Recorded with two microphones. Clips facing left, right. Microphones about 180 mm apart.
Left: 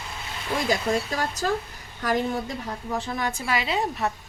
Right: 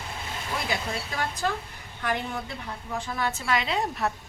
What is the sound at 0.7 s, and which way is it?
Speech, 40° left (ahead or behind).